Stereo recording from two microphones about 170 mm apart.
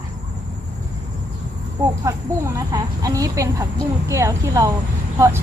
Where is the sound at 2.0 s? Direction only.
20° right (ahead or behind).